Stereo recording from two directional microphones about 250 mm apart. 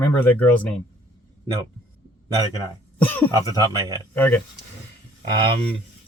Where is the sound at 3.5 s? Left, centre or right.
Centre.